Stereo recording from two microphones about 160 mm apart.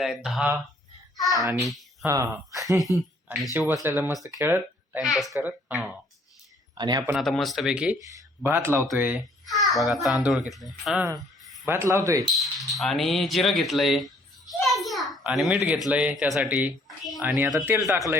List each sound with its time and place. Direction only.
0.0 s a child's voice: centre (ahead or behind)
1.6 s a sound: centre (ahead or behind)
2.0 s speech: 20° right (ahead or behind)
3.8 s speech: 10° right (ahead or behind)
5.4 s speech: 10° right (ahead or behind)
6.7 s speech: 25° right (ahead or behind)
7.1 s a child's voice: centre (ahead or behind)
9.5 s a child's voice: centre (ahead or behind)
11.6 s speech: 15° right (ahead or behind)
12.4 s a child's voice: centre (ahead or behind)
17.5 s speech: 20° right (ahead or behind)